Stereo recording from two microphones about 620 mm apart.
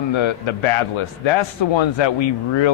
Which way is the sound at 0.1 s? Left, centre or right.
Left.